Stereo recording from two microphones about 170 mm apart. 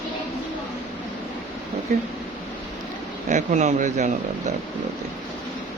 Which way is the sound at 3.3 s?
45° right (ahead or behind).